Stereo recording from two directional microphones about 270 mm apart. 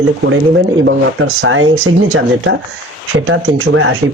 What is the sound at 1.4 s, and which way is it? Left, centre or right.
Speech, right.